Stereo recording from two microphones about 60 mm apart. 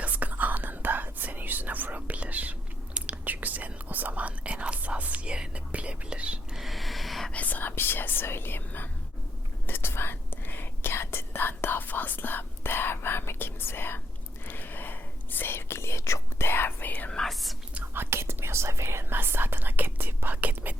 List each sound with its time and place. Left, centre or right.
0.0 s whispering: right
6.6 s a sound: centre
7.3 s whispering: left
17.1 s whispering: centre
17.9 s whispering: right